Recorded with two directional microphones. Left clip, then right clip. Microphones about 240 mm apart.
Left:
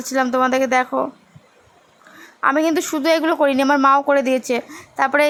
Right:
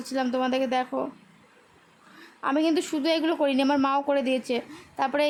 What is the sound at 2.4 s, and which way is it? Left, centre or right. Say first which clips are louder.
Speech: left 8 dB; centre.